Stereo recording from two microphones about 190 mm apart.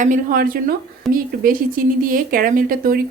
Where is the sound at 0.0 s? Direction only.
45° right (ahead or behind).